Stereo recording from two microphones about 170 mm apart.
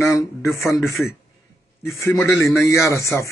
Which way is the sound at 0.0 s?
15° left (ahead or behind).